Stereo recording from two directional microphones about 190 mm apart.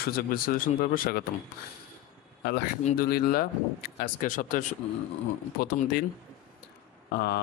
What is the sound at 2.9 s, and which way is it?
Speech, 50° left (ahead or behind).